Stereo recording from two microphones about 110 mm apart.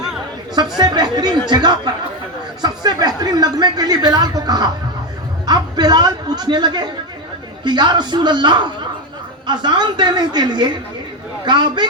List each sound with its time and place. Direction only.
0.8 s speech: 40° right (ahead or behind)